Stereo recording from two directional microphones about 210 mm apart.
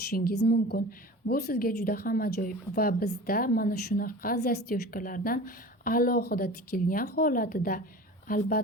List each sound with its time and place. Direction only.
0.1 s a woman's voice: 45° left (ahead or behind)